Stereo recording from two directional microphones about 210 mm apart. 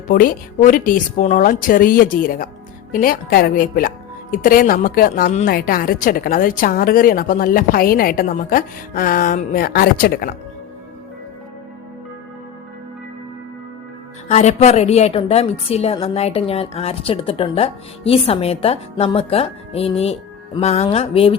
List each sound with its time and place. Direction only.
0.1 s a woman's voice: 40° left (ahead or behind)
14.3 s a woman's voice: 30° left (ahead or behind)